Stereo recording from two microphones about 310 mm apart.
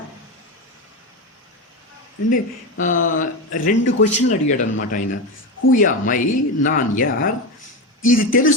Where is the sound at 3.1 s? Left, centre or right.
Left.